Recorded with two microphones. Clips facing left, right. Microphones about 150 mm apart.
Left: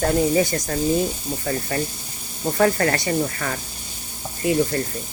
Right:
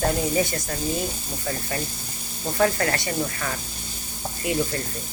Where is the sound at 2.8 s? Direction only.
40° left (ahead or behind).